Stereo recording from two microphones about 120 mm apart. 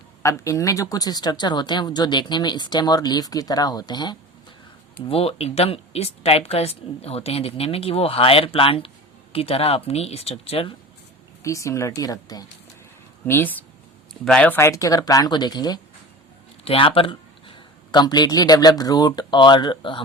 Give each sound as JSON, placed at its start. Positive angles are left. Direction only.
{"t": 0.2, "sound": "speech", "side_deg": 25}
{"t": 5.0, "sound": "a woman's voice", "side_deg": 55}
{"t": 11.4, "sound": "speech", "side_deg": 25}
{"t": 13.2, "sound": "speech", "side_deg": 15}
{"t": 14.1, "sound": "speech", "side_deg": 5}
{"t": 14.5, "sound": "speech", "side_deg": 25}
{"t": 16.6, "sound": "a man's voice", "side_deg": 50}